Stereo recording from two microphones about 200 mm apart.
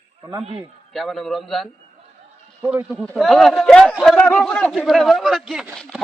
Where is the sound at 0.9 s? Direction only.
Centre (ahead or behind).